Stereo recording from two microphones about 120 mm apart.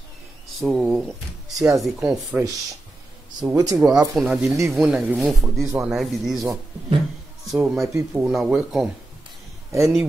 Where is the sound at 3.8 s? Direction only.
5° right (ahead or behind).